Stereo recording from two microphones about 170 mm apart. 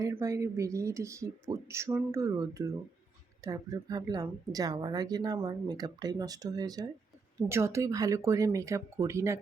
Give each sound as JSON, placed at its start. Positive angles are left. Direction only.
{"t": 0.0, "sound": "a woman's voice", "side_deg": -20}